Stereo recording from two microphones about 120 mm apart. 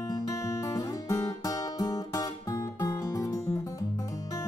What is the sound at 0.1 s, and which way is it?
Guitar, 30° left (ahead or behind).